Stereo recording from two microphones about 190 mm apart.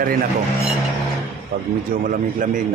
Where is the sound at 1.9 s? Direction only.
45° right (ahead or behind).